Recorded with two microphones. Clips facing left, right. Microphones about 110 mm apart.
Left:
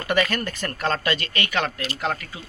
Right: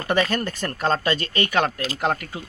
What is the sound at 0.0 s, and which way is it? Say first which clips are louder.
Speech: right 1 dB; 25° right (ahead or behind).